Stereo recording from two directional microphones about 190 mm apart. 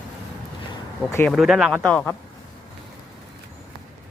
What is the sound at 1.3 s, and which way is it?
Speech, centre (ahead or behind).